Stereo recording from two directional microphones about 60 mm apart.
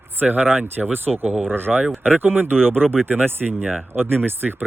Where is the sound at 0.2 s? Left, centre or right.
Right.